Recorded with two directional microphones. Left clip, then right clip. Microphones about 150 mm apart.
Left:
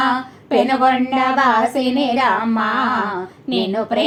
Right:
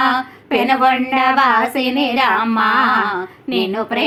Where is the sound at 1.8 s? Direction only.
45° right (ahead or behind).